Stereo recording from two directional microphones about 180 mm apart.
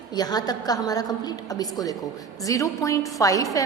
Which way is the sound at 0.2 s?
20° left (ahead or behind).